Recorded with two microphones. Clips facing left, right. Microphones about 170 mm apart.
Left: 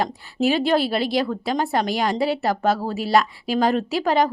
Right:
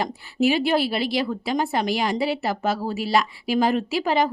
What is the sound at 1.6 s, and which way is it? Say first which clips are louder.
Speech: left 2 dB; 50° left (ahead or behind).